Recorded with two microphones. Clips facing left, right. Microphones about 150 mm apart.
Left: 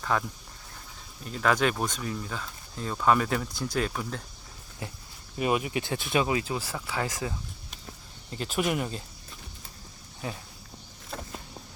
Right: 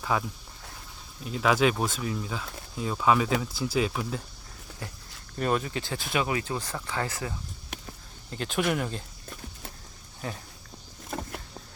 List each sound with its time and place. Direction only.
0.0 s speech: 5° right (ahead or behind)
4.8 s speech: 20° left (ahead or behind)
8.3 s speech: 5° left (ahead or behind)